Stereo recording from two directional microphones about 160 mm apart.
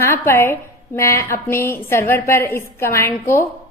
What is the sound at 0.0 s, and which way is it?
A woman's voice, 15° left (ahead or behind).